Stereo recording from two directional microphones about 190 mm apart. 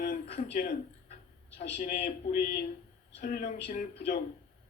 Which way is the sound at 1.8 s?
45° left (ahead or behind).